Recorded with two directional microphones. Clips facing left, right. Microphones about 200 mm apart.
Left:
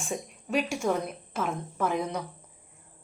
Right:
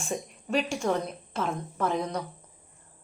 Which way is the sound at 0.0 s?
Centre (ahead or behind).